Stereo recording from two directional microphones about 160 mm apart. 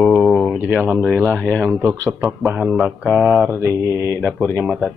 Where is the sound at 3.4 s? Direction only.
15° right (ahead or behind).